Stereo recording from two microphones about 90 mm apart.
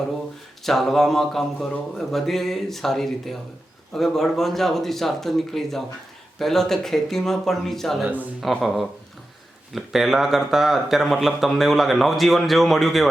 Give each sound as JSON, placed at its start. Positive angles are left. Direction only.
{"t": 0.6, "sound": "speech", "side_deg": 5}
{"t": 8.0, "sound": "speech", "side_deg": -20}
{"t": 8.4, "sound": "speech", "side_deg": 0}